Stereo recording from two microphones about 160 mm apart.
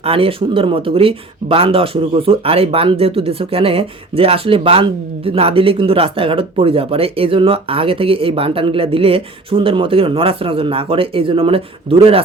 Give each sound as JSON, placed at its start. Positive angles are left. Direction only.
{"t": 0.0, "sound": "speech", "side_deg": -35}